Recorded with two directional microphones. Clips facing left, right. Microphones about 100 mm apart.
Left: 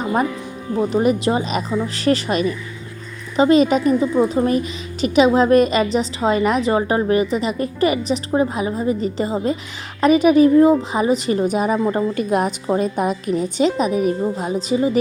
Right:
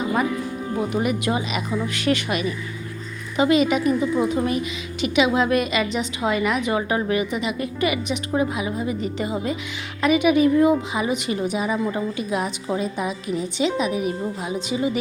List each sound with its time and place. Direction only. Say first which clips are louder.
0.9 s a woman's voice: left 6 dB; 30° left (ahead or behind)